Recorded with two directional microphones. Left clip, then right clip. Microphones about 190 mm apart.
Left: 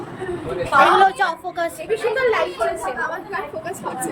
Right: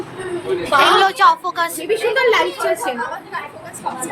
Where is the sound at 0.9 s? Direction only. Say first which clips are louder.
Right 4 dB; 15° left (ahead or behind).